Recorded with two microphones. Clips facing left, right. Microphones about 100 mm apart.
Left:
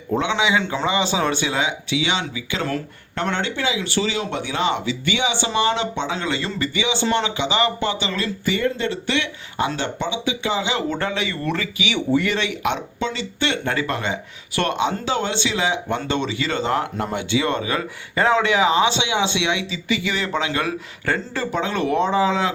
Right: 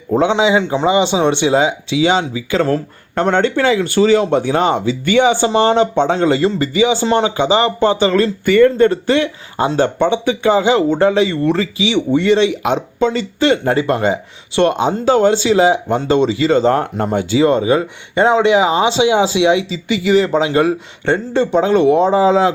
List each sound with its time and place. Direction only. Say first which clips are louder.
0.2 s speech: right 8 dB; 30° right (ahead or behind)
10.8 s speech: right 11 dB; 30° right (ahead or behind)
14.8 s speech: right 9 dB; 45° right (ahead or behind)